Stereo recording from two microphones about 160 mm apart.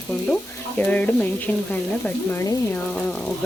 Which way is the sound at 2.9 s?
5° left (ahead or behind).